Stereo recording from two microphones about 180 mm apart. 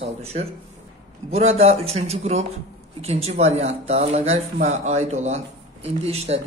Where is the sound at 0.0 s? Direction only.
35° right (ahead or behind).